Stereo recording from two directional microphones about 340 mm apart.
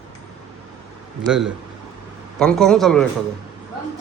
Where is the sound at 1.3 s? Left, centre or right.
Centre.